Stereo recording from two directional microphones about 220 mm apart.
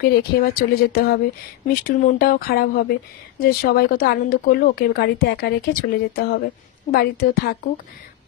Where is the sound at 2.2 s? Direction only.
45° left (ahead or behind).